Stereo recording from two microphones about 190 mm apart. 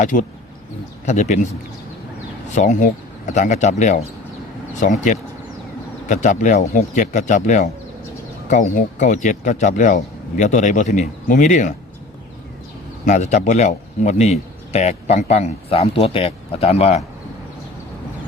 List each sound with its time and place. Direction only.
0.0 s speech: 45° left (ahead or behind)
2.6 s speech: 40° left (ahead or behind)
13.1 s speech: 40° left (ahead or behind)